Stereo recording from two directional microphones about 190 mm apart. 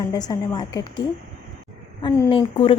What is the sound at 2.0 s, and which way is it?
Speech, 25° left (ahead or behind).